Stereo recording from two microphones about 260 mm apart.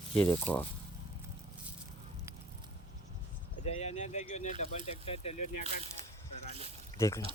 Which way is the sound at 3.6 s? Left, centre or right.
Left.